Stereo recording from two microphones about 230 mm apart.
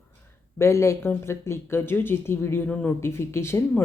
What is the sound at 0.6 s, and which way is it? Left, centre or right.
Speech, centre.